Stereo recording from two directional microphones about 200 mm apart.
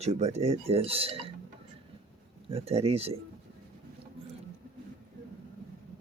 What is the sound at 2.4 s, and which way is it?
Speech, 30° right (ahead or behind).